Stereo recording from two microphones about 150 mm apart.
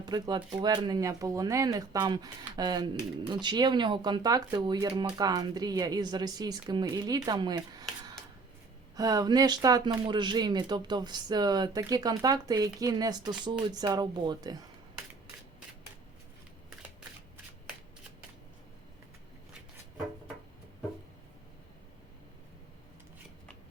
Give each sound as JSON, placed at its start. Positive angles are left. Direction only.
{"t": 0.0, "sound": "speech", "side_deg": -30}